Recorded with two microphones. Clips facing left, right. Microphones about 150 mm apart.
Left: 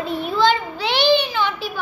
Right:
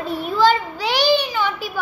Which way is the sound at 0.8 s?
10° right (ahead or behind).